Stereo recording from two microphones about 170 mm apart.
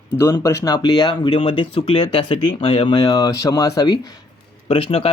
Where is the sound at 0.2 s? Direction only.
15° left (ahead or behind).